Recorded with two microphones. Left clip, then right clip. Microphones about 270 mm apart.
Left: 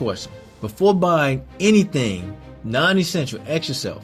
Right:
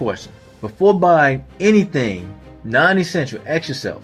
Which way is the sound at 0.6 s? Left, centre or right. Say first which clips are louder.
Right 4 dB; left.